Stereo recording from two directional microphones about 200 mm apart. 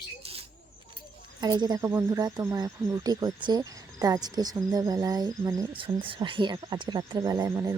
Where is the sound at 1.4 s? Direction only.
20° right (ahead or behind).